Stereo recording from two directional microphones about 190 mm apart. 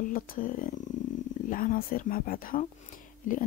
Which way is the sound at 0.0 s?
45° left (ahead or behind).